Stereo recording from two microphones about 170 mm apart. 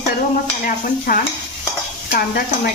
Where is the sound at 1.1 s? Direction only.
55° left (ahead or behind).